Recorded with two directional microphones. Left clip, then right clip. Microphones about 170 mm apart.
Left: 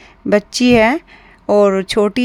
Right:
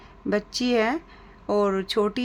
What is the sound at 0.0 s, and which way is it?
A woman's voice, 45° left (ahead or behind).